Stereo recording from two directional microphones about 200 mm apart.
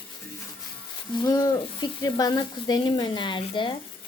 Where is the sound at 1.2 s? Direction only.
20° left (ahead or behind).